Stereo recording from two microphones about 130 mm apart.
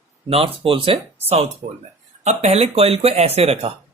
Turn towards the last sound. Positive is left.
turn(degrees=-50)  # may be behind; listen again after turning